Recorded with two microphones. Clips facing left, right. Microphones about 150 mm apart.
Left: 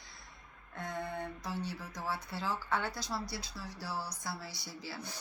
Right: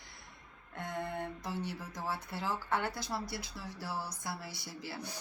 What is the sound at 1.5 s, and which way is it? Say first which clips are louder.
Speech: even; 50° right (ahead or behind).